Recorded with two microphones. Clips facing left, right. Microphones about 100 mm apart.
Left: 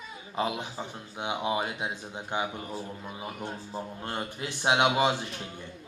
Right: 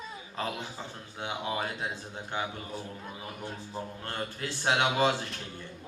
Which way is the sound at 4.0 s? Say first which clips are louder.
Left 2 dB; 20° left (ahead or behind).